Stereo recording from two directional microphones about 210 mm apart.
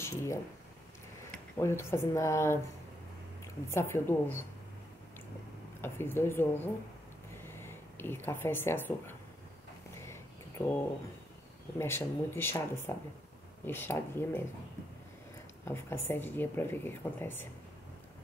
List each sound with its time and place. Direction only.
0.0 s speech: 15° left (ahead or behind)
1.6 s speech: 10° left (ahead or behind)
3.7 s speech: 10° left (ahead or behind)
5.8 s speech: 10° left (ahead or behind)
11.8 s speech: 10° left (ahead or behind)
15.6 s speech: 10° left (ahead or behind)